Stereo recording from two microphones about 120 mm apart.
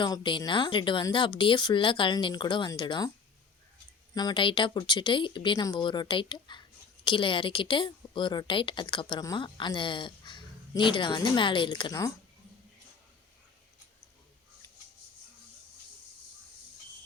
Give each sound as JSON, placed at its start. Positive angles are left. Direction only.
{"t": 0.0, "sound": "a woman's voice", "side_deg": 40}
{"t": 4.1, "sound": "a woman's voice", "side_deg": 35}